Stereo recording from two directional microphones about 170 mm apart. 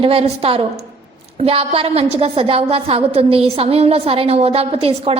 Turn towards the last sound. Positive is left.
turn(degrees=-35)  # may be behind; listen again after turning